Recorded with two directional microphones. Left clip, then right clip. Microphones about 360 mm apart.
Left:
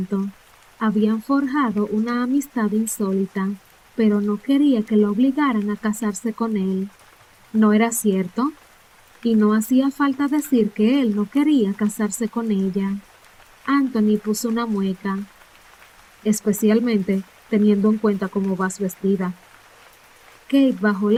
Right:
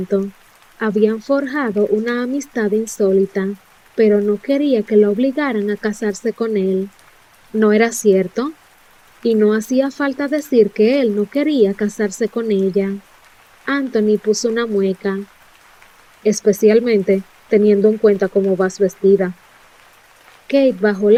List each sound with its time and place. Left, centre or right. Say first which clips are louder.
0.8 s speech: right 6 dB; centre
16.2 s speech: right 8 dB; centre
20.5 s speech: right 5 dB; centre